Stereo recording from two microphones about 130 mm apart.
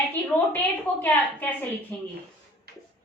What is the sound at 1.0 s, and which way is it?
A woman's voice, 15° left (ahead or behind).